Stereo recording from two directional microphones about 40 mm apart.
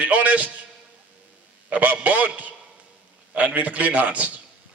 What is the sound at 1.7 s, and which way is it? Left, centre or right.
Speech, right.